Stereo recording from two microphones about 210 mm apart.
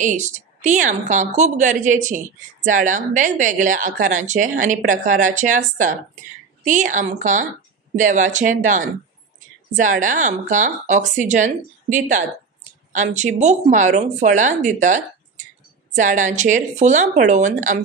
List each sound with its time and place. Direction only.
0.0 s a woman's voice: 35° right (ahead or behind)